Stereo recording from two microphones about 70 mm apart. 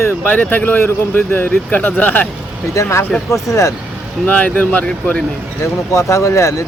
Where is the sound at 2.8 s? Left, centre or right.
Left.